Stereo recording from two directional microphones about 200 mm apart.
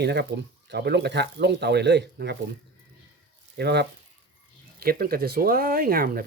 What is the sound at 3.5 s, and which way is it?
Speech, 55° right (ahead or behind).